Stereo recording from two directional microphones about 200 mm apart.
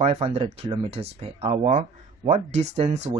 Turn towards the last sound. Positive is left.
turn(degrees=-30)  # may be behind; listen again after turning